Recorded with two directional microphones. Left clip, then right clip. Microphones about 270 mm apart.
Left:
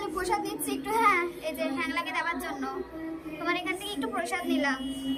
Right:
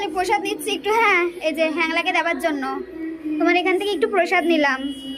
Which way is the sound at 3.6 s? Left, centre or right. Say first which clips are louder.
Right 13 dB; centre.